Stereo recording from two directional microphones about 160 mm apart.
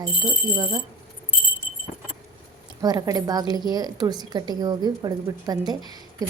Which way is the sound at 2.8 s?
25° right (ahead or behind).